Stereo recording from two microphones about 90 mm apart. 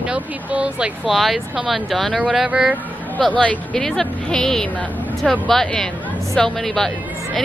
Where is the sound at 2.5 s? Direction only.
15° right (ahead or behind).